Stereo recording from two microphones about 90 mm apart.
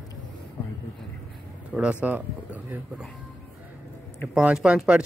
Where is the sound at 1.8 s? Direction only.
15° right (ahead or behind).